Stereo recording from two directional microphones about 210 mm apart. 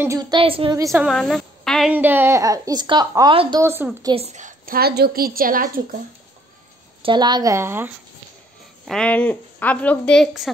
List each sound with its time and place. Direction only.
0.0 s a woman's voice: 15° right (ahead or behind)
0.7 s a woman's voice: 15° right (ahead or behind)
1.0 s a woman's voice: 5° left (ahead or behind)
4.1 s a woman's voice: 30° right (ahead or behind)
7.0 s a woman's voice: 20° right (ahead or behind)
8.8 s a woman's voice: 5° left (ahead or behind)